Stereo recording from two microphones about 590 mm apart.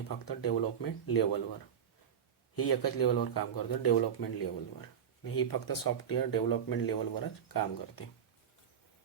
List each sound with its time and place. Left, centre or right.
0.3 s speech: left
2.6 s speech: left